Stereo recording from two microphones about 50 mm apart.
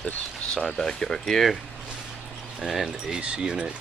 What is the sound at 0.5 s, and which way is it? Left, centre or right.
Speech, centre.